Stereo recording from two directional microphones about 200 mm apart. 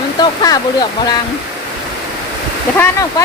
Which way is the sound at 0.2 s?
20° left (ahead or behind).